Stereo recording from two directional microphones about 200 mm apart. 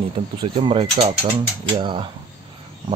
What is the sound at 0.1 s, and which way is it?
Speech, 25° right (ahead or behind).